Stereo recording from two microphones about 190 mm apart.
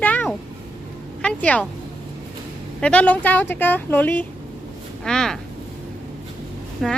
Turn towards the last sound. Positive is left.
turn(degrees=0)  # may be behind; listen again after turning